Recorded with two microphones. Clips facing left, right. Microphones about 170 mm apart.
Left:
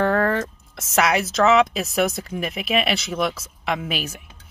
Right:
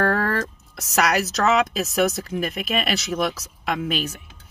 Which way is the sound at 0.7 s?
Centre (ahead or behind).